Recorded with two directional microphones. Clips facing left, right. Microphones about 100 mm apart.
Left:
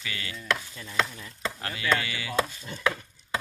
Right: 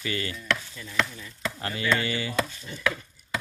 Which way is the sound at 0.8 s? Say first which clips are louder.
Even; 20° left (ahead or behind).